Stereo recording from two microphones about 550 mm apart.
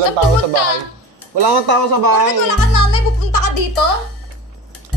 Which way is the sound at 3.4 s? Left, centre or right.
Left.